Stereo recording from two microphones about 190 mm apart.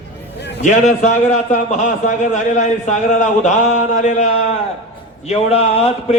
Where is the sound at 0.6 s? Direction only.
40° left (ahead or behind).